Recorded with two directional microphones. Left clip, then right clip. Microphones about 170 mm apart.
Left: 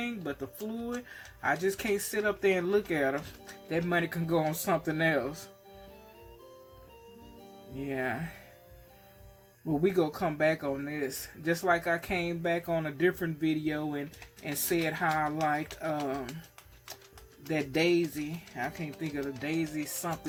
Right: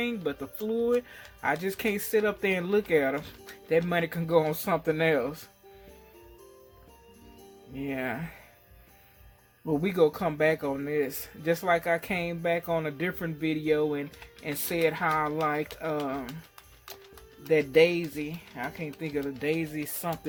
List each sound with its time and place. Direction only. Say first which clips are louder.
0.0 s speech: right 5 dB; 25° right (ahead or behind)
7.8 s speech: right 1 dB; 30° right (ahead or behind)
9.8 s speech: right 4 dB; 30° right (ahead or behind)
17.4 s speech: right 8 dB; 25° right (ahead or behind)